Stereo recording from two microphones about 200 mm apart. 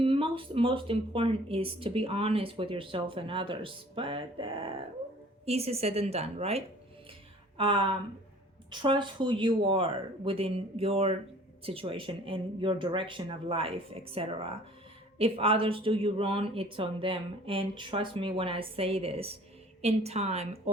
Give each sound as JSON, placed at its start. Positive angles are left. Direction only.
{"t": 0.0, "sound": "a woman's voice", "side_deg": -25}